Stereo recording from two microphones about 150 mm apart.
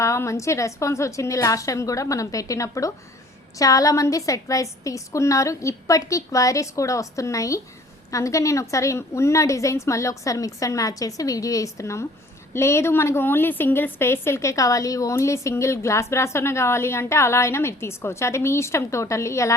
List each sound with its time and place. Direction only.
0.0 s a woman's voice: 20° left (ahead or behind)